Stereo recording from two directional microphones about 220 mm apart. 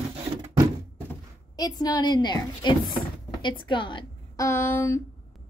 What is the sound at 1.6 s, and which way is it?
A woman's voice, 15° left (ahead or behind).